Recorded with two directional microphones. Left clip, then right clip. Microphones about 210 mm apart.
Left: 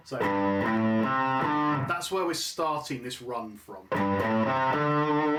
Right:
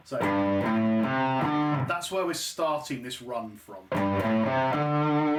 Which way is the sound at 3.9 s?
20° left (ahead or behind).